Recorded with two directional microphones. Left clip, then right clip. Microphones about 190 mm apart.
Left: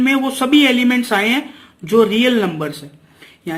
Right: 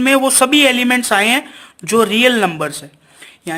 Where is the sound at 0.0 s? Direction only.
45° right (ahead or behind).